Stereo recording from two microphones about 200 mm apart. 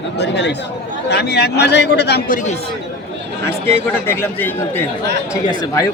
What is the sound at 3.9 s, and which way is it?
Speech, 10° left (ahead or behind).